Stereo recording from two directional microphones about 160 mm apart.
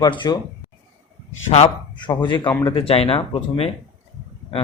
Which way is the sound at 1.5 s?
35° left (ahead or behind).